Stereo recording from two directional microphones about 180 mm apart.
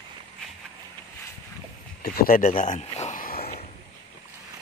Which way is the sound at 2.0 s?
60° left (ahead or behind).